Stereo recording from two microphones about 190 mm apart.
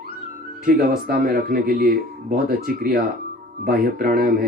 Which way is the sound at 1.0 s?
50° right (ahead or behind).